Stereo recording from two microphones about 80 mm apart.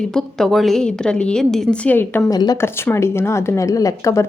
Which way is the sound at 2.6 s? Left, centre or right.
Left.